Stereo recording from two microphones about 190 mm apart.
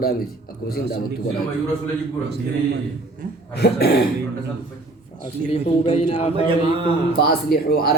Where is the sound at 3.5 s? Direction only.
55° left (ahead or behind).